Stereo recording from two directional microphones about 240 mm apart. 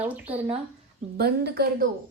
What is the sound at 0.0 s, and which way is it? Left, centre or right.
Speech, centre.